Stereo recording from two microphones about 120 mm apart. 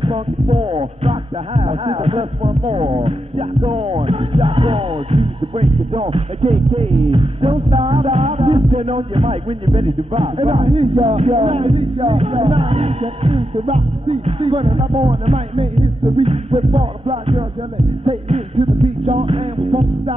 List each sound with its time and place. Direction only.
0.0 s music: 50° right (ahead or behind)